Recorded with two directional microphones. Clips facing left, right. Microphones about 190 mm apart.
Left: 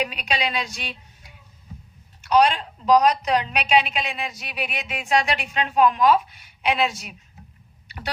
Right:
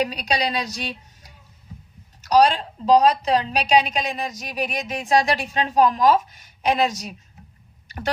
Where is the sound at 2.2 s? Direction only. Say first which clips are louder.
Right 2 dB; 35° right (ahead or behind).